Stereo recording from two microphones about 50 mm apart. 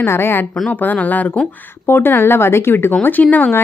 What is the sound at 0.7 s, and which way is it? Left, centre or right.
Speech, left.